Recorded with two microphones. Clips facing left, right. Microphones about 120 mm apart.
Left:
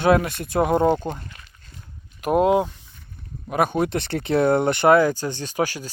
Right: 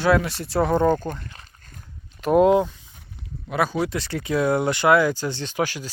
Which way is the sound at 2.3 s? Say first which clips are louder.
Right 2 dB; 5° left (ahead or behind).